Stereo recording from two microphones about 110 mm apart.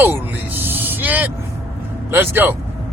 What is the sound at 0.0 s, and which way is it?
Music, 20° right (ahead or behind).